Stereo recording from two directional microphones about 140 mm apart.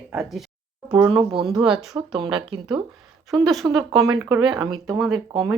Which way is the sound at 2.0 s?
35° right (ahead or behind).